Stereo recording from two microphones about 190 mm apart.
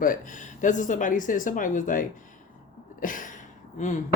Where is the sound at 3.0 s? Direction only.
45° left (ahead or behind).